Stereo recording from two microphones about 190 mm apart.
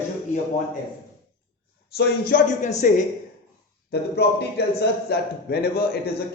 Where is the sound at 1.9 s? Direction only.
50° left (ahead or behind).